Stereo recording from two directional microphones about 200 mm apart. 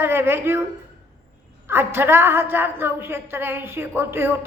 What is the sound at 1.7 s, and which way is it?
A woman's voice, 10° right (ahead or behind).